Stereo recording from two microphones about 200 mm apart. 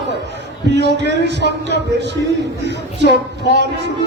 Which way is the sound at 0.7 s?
60° right (ahead or behind).